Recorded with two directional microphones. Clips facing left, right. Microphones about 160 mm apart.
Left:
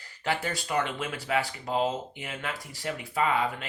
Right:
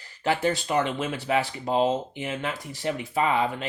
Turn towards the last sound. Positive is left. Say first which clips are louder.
# right 3 dB
turn(degrees=-25)  # may be behind; listen again after turning